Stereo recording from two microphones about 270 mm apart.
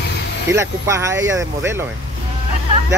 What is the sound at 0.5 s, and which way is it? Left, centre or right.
Speech, centre.